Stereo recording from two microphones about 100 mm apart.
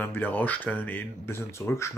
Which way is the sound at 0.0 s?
20° left (ahead or behind).